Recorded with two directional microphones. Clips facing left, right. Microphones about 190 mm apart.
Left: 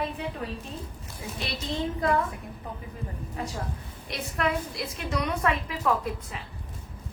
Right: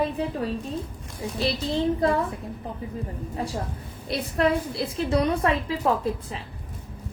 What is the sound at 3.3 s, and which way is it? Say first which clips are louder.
A woman's voice: right 4 dB; 35° right (ahead or behind).